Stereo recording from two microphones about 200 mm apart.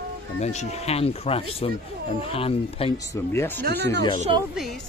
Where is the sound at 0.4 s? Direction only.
35° left (ahead or behind).